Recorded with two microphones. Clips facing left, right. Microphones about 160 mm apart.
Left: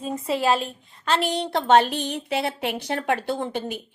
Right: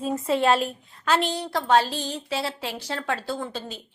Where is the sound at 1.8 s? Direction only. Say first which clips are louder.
Left 3 dB; 60° left (ahead or behind).